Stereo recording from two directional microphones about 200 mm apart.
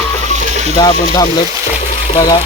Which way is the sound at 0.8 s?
20° left (ahead or behind).